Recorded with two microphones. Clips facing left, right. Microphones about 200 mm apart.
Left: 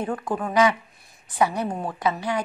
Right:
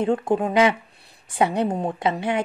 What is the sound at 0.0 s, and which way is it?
A woman's voice, 25° right (ahead or behind).